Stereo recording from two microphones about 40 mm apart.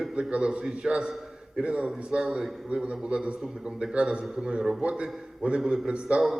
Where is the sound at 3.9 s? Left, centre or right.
Right.